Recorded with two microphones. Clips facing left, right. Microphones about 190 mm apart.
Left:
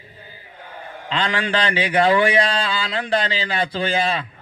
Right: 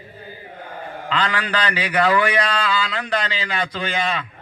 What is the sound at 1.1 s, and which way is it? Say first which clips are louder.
A man's voice: left 1 dB; 25° left (ahead or behind).